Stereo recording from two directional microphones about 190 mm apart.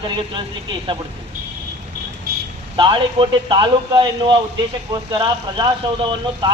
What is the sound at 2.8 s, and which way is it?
A man's voice, 25° right (ahead or behind).